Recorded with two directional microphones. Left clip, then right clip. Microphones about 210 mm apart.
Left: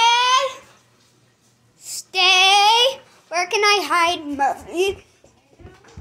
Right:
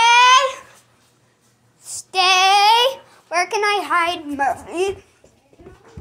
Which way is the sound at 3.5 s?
10° left (ahead or behind).